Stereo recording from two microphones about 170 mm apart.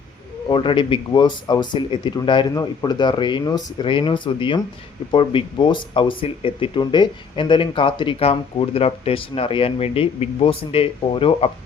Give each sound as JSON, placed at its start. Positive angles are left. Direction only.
{"t": 0.4, "sound": "speech", "side_deg": 30}